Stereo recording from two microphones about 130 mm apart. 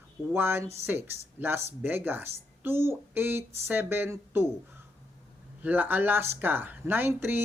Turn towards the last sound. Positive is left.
turn(degrees=-15)  # may be behind; listen again after turning